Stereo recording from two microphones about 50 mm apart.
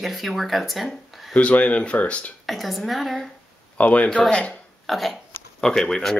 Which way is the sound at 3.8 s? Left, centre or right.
Left.